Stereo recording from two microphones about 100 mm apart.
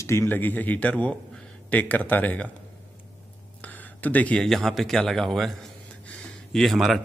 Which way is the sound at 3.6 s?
15° left (ahead or behind).